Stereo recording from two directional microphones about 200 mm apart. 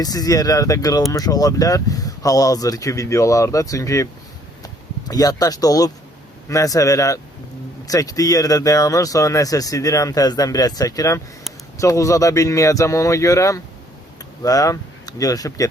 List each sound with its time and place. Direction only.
0.0 s speech: 20° left (ahead or behind)